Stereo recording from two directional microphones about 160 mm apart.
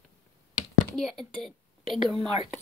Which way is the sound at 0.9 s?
Centre (ahead or behind).